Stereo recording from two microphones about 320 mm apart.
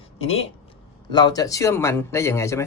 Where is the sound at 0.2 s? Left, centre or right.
Centre.